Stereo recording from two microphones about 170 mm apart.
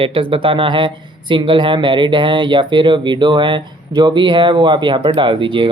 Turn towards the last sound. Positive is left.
turn(degrees=-30)  # may be behind; listen again after turning